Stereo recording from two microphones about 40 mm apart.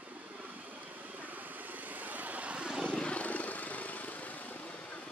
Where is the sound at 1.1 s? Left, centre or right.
Right.